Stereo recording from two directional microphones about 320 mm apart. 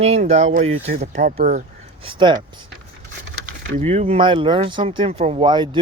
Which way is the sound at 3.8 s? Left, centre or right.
Centre.